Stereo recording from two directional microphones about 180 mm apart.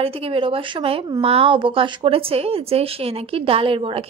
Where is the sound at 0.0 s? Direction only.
30° right (ahead or behind).